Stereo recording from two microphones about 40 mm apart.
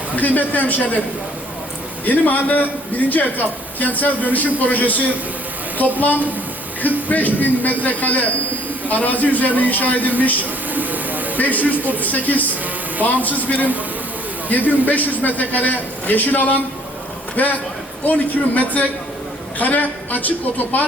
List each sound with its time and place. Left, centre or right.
0.2 s a man's voice: left
2.0 s a man's voice: left
10.7 s a sound: right
11.3 s a man's voice: left